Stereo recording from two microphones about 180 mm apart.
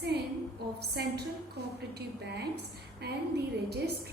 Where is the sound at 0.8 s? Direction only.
65° right (ahead or behind).